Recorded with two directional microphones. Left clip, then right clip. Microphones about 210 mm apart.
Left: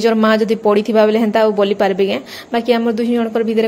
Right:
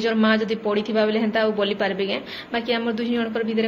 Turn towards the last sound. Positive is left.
turn(degrees=45)  # may be behind; listen again after turning